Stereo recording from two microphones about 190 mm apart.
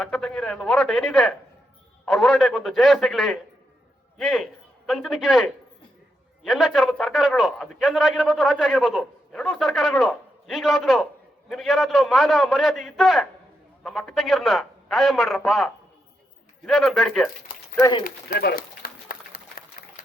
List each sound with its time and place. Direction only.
0.0 s a man's voice: centre (ahead or behind)
17.7 s speech: 20° left (ahead or behind)
18.0 s run: 55° left (ahead or behind)